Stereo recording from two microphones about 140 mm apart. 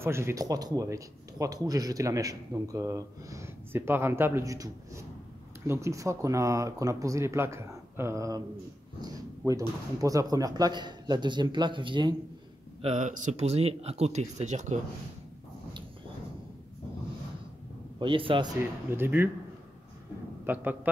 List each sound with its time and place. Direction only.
0.0 s speech: 20° right (ahead or behind); by 12.2 s 35° right (ahead or behind)
12.8 s speech: 60° right (ahead or behind)
17.9 s speech: 40° right (ahead or behind)
18.6 s speech: 15° right (ahead or behind)
20.4 s speech: 10° right (ahead or behind)